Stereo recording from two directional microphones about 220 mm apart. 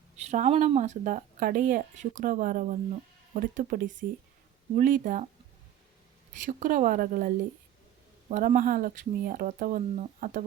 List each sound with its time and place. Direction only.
0.2 s speech: 30° right (ahead or behind)
6.4 s speech: 35° right (ahead or behind)